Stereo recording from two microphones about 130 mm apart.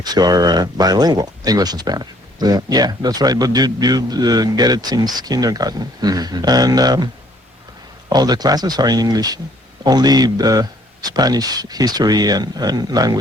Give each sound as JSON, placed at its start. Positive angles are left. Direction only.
{"t": 0.0, "sound": "speech", "side_deg": -30}
{"t": 8.1, "sound": "speech", "side_deg": -30}